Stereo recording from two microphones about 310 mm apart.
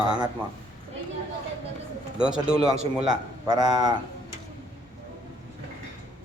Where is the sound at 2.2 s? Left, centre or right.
Centre.